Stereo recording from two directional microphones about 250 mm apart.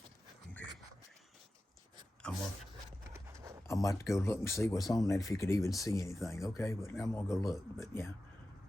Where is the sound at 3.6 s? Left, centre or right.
Centre.